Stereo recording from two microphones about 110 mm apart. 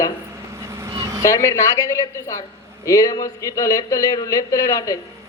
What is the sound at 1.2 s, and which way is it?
A woman's voice, 30° left (ahead or behind).